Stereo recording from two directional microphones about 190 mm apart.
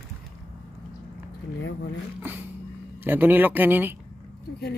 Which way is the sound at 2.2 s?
10° right (ahead or behind).